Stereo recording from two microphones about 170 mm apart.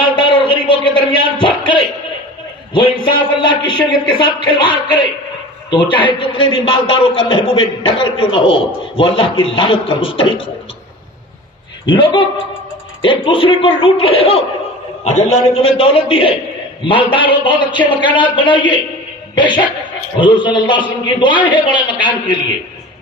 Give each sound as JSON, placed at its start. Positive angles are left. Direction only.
{"t": 0.0, "sound": "a sound", "side_deg": 30}
{"t": 2.7, "sound": "a man's voice", "side_deg": 30}
{"t": 11.9, "sound": "a man's voice", "side_deg": 30}